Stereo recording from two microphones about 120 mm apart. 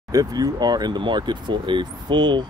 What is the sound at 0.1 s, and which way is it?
Speech, 30° right (ahead or behind).